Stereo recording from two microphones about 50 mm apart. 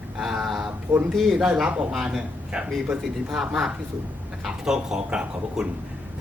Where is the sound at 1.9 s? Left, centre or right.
Centre.